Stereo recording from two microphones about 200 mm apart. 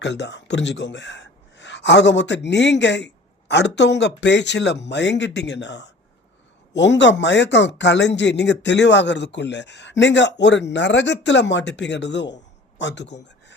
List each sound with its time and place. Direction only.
0.0 s speech: 60° left (ahead or behind)